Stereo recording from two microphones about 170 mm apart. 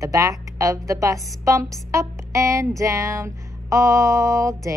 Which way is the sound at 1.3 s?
20° right (ahead or behind).